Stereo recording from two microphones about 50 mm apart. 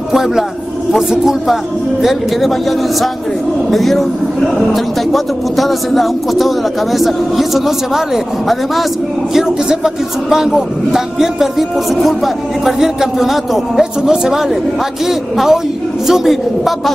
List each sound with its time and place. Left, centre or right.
0.1 s a man's voice: centre
3.7 s a man's voice: centre
9.3 s a man's voice: centre